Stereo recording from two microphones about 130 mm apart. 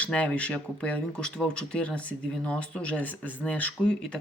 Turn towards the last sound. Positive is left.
turn(degrees=10)  # may be behind; listen again after turning